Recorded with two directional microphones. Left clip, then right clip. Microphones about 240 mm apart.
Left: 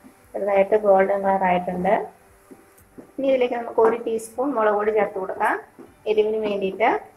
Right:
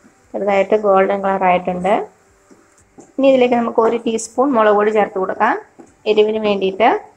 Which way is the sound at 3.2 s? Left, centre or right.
Right.